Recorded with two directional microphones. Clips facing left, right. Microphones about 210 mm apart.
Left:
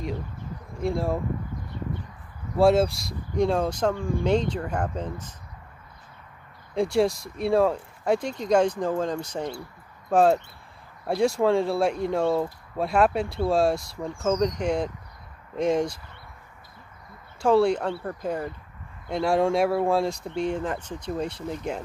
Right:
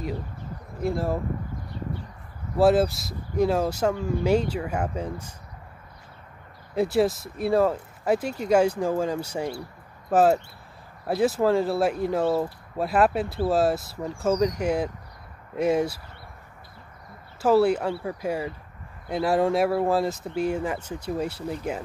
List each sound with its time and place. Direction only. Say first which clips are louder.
0.7 s speech: even; centre (ahead or behind)
2.5 s speech: even; centre (ahead or behind)
6.7 s speech: even; 5° right (ahead or behind)
17.4 s speech: right 1 dB; 5° right (ahead or behind)